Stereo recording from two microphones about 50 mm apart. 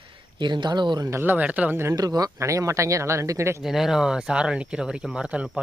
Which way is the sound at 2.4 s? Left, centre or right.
Right.